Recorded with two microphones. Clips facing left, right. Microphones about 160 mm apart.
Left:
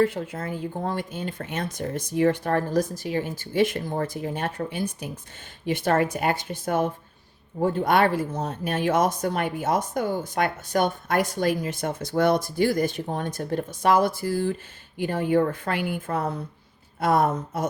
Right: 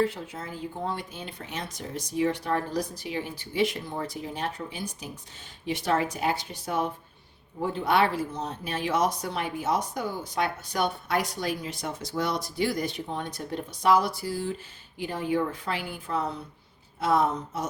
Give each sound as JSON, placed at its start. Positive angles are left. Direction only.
{"t": 0.0, "sound": "a woman's voice", "side_deg": 55}